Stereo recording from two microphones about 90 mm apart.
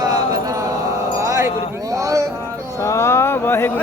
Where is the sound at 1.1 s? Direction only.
35° right (ahead or behind).